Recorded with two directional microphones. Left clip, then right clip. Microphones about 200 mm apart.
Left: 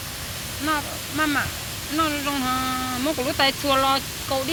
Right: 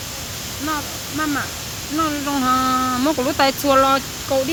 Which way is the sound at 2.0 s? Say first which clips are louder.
Right 4 dB; 25° right (ahead or behind).